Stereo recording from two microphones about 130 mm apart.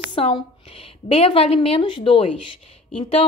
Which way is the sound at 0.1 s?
45° left (ahead or behind).